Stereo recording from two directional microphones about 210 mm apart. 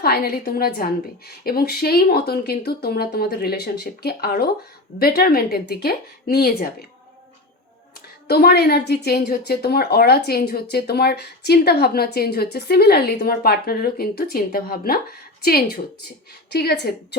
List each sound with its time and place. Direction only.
0.0 s a woman's voice: 45° left (ahead or behind)
8.3 s a woman's voice: 50° left (ahead or behind)